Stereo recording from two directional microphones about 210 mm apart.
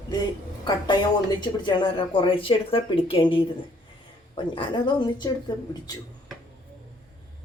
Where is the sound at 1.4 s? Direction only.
20° left (ahead or behind).